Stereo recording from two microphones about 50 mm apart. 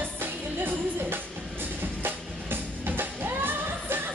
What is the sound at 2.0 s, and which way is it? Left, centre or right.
Music, right.